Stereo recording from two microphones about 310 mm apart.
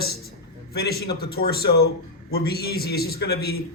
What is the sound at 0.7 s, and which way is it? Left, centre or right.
A man's voice, left.